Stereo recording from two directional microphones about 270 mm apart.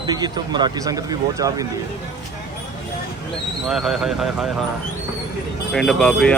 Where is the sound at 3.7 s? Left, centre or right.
Centre.